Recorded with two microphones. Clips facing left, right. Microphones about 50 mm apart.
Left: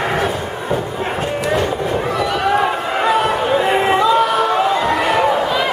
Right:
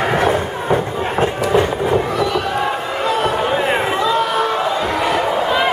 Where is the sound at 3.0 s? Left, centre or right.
Centre.